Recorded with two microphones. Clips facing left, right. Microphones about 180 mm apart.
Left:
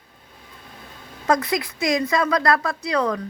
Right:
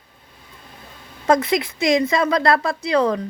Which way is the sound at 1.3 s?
25° right (ahead or behind).